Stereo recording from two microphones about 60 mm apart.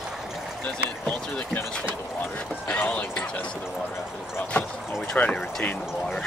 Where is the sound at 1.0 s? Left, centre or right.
Left.